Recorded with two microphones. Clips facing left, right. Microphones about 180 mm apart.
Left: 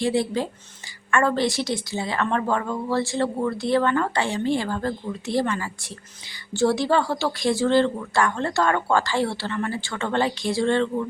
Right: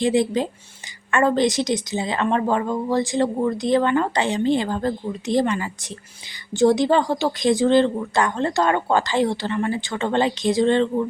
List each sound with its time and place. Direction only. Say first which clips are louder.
0.0 s a woman's voice: right 3 dB; 20° right (ahead or behind)